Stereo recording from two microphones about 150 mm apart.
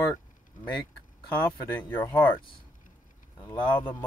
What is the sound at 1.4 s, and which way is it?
Speech, 15° left (ahead or behind).